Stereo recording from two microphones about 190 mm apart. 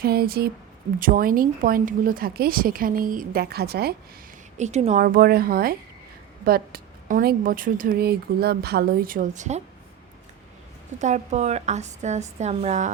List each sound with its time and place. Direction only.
0.0 s a woman's voice: 55° right (ahead or behind)
4.5 s a woman's voice: 35° right (ahead or behind)
5.0 s a woman's voice: 50° right (ahead or behind)
11.0 s a woman's voice: 35° right (ahead or behind)